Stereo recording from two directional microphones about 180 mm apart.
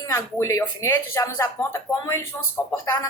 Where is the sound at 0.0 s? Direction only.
15° left (ahead or behind).